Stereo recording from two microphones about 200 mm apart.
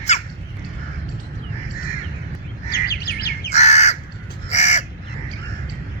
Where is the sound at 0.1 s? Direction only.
35° left (ahead or behind).